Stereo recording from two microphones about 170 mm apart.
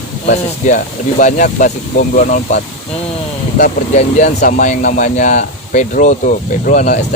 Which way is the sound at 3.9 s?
45° left (ahead or behind).